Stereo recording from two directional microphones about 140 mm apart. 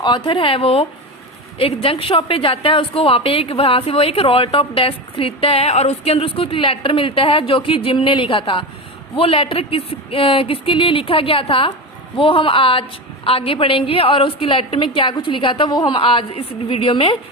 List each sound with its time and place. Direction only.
0.0 s a woman's voice: 35° left (ahead or behind)